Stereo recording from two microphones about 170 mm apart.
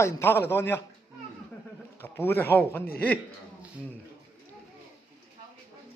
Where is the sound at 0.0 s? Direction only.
15° left (ahead or behind).